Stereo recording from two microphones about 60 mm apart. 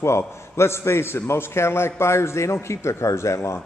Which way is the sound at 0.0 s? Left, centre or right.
Left.